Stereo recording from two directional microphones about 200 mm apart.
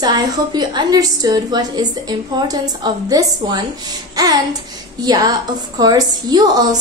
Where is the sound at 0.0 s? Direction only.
20° right (ahead or behind).